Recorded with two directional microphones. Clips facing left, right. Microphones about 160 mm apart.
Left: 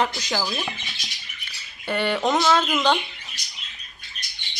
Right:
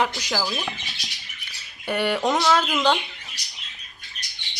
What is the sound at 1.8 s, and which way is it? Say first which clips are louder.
Speech: even; 15° right (ahead or behind).